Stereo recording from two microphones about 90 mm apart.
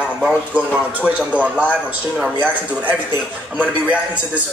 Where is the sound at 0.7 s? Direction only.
15° right (ahead or behind).